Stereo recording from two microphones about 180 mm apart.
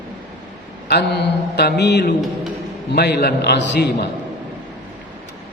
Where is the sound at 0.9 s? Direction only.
70° left (ahead or behind).